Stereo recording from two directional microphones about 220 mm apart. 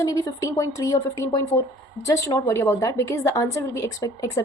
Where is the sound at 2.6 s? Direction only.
15° left (ahead or behind).